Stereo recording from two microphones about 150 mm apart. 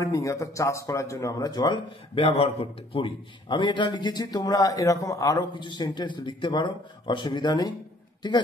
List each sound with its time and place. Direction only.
0.0 s speech: 20° left (ahead or behind)